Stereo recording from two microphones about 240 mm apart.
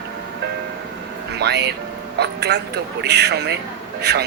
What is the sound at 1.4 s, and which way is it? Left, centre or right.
A man's voice, right.